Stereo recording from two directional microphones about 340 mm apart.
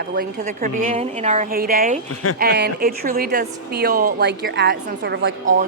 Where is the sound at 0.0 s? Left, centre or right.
Right.